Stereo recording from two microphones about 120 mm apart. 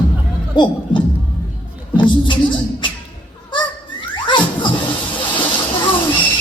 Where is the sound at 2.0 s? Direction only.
45° left (ahead or behind).